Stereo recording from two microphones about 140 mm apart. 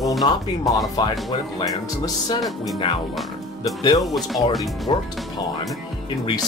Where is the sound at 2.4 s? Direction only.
Centre (ahead or behind).